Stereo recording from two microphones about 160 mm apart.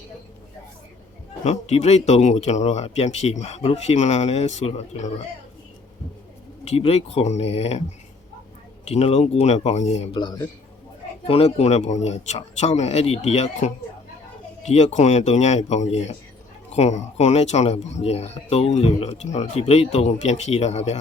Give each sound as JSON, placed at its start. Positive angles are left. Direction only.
{"t": 1.5, "sound": "speech", "side_deg": 45}
{"t": 6.7, "sound": "speech", "side_deg": 40}
{"t": 8.8, "sound": "speech", "side_deg": 40}
{"t": 11.3, "sound": "speech", "side_deg": 40}